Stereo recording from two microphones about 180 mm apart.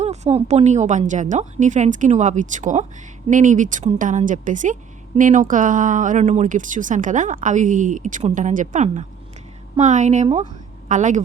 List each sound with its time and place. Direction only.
0.0 s a woman's voice: 35° right (ahead or behind)